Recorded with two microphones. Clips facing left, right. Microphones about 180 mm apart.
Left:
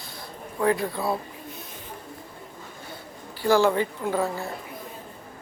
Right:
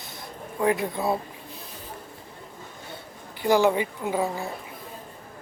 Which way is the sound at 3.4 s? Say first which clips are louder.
Even; 15° right (ahead or behind).